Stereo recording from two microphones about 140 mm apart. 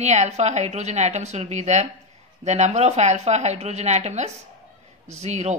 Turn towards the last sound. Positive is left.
turn(degrees=-55)  # may be behind; listen again after turning